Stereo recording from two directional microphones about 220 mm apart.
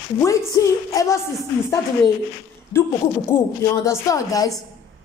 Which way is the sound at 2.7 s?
10° left (ahead or behind).